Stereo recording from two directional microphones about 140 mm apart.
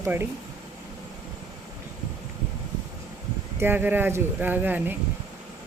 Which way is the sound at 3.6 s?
15° right (ahead or behind).